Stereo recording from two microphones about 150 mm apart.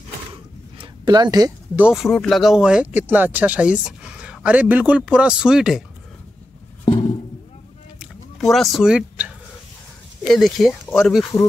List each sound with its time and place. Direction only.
0.7 s a sound: 30° right (ahead or behind)
1.8 s speech: 5° right (ahead or behind)
8.4 s speech: centre (ahead or behind)